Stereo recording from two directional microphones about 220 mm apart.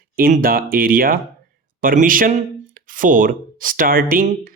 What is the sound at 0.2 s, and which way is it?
Speech, 40° right (ahead or behind).